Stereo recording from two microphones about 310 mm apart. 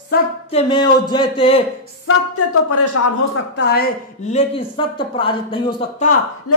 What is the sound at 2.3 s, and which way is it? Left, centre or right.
Speech, left.